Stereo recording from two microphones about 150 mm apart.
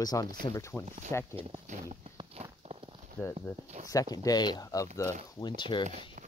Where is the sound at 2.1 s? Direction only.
40° right (ahead or behind).